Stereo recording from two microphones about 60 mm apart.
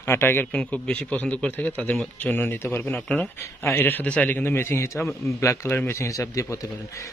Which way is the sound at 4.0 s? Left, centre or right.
Left.